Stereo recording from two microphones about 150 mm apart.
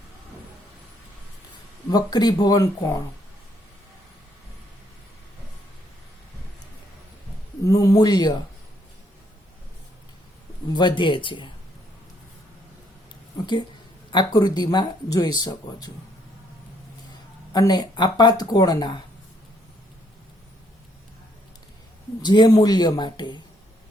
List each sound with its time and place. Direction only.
1.9 s speech: 25° left (ahead or behind)
7.6 s speech: 20° left (ahead or behind)
10.7 s speech: 30° left (ahead or behind)
13.4 s speech: 30° left (ahead or behind)
17.5 s speech: 25° left (ahead or behind)
22.2 s speech: 30° left (ahead or behind)